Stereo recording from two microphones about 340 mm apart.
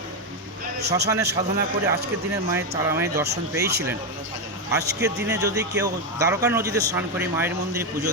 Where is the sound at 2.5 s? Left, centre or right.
Centre.